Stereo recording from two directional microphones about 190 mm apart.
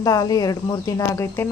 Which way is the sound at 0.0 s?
20° left (ahead or behind).